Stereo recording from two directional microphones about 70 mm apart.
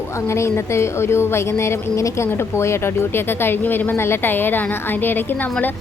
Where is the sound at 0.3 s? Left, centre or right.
Left.